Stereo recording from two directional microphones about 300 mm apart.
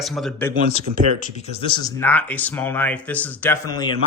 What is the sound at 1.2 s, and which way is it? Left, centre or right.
Speech, centre.